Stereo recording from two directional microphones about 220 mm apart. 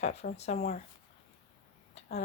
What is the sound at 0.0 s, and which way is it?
Speech, 30° left (ahead or behind).